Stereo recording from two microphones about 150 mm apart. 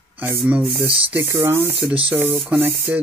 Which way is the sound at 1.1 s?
15° right (ahead or behind).